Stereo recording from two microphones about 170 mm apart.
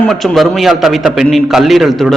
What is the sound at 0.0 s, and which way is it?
A man's voice, 5° left (ahead or behind).